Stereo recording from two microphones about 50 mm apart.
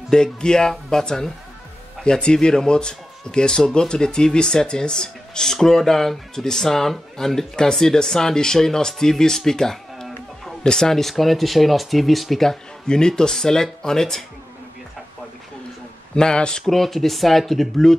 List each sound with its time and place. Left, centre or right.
0.1 s a man's voice: centre
16.2 s a man's voice: centre